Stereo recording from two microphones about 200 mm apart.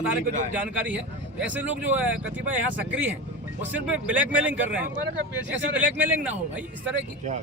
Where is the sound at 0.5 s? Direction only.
10° right (ahead or behind).